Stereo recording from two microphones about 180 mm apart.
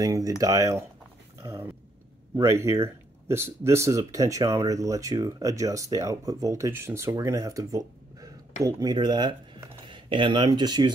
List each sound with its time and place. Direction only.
0.0 s speech: 20° right (ahead or behind)